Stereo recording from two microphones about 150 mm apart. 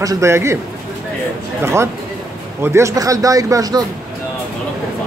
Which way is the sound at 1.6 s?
20° right (ahead or behind).